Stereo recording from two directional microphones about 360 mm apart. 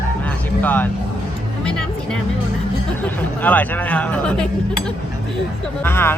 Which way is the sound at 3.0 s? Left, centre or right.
Centre.